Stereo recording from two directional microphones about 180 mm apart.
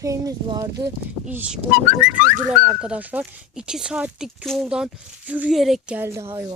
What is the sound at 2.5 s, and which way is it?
Speech, 20° right (ahead or behind).